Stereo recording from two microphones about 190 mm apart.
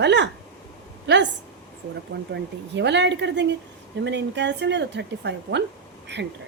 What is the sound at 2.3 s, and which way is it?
A woman's voice, 65° right (ahead or behind).